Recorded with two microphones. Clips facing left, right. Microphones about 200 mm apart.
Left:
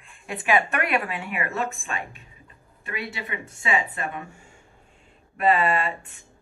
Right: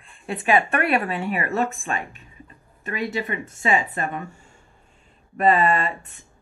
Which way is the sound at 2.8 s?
40° right (ahead or behind).